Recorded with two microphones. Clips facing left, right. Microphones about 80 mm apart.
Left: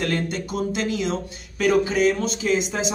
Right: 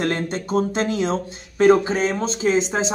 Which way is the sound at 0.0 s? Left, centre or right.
Right.